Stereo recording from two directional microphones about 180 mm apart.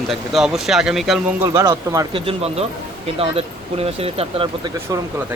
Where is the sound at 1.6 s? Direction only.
20° right (ahead or behind).